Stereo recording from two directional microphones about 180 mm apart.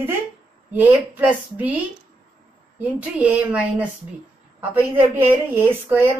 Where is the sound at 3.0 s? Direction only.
5° right (ahead or behind).